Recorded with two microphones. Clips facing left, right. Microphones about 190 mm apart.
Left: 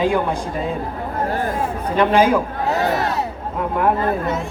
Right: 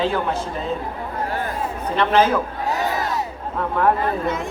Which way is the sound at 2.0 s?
10° left (ahead or behind).